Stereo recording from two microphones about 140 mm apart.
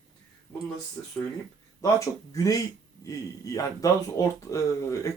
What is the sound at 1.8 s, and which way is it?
Speech, 25° left (ahead or behind).